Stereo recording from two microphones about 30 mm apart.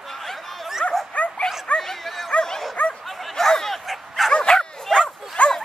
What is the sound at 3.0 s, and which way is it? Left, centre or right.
Bow-wow, centre.